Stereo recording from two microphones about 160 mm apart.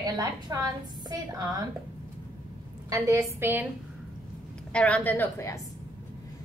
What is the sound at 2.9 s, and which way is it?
Speech, 20° right (ahead or behind).